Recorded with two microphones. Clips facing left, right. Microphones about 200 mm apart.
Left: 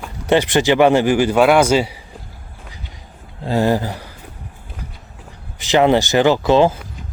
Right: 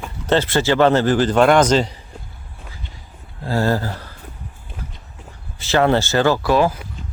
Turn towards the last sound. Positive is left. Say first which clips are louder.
# left 3 dB
turn(degrees=25)  # may be behind; listen again after turning